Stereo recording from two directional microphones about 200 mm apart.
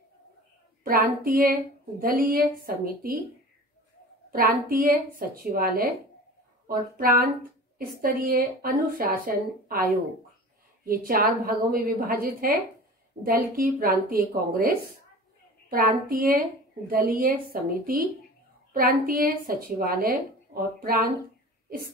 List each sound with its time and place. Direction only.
0.8 s a woman's voice: 45° right (ahead or behind)
4.3 s a woman's voice: 45° right (ahead or behind)
10.9 s a woman's voice: 45° right (ahead or behind)